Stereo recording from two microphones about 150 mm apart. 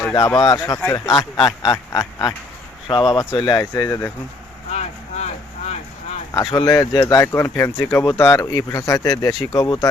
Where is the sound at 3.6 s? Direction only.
20° left (ahead or behind).